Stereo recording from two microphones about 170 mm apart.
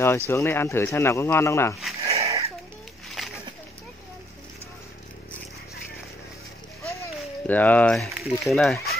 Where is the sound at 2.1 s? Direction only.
20° right (ahead or behind).